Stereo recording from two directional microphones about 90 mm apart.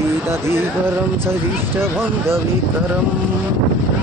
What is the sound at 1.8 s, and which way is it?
Speech, 30° right (ahead or behind).